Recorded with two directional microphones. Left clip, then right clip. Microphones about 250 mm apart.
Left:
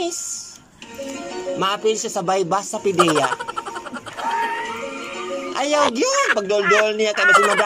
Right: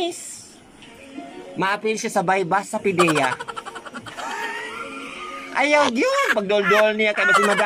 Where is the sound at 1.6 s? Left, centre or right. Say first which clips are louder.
Left 1 dB; centre.